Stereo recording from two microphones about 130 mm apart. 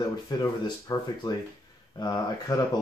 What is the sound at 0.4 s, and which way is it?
Speech, 30° left (ahead or behind).